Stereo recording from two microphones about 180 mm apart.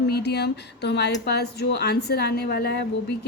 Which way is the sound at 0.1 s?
65° left (ahead or behind).